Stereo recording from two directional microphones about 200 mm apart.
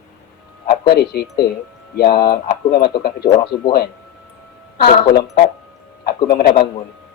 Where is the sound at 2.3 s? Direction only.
50° left (ahead or behind).